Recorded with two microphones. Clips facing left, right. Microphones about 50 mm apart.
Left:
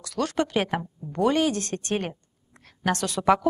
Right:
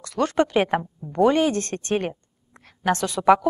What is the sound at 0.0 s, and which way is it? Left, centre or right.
Speech, right.